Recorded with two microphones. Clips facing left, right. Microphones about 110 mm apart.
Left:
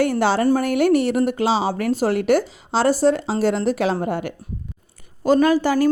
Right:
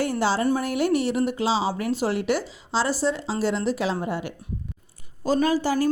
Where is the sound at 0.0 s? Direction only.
60° left (ahead or behind).